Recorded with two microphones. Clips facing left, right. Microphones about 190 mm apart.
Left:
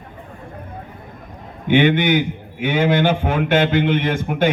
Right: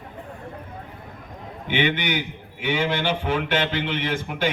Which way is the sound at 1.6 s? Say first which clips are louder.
Left 9 dB; 50° left (ahead or behind).